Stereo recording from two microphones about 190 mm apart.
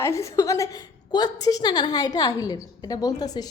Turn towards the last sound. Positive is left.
turn(degrees=20)  # may be behind; listen again after turning